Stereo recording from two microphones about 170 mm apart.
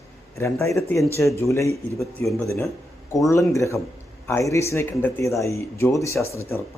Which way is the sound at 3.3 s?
20° left (ahead or behind).